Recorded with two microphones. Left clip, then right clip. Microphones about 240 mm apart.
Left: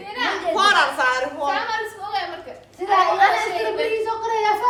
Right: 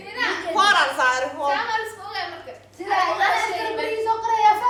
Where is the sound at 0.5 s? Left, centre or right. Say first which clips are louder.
Even; centre.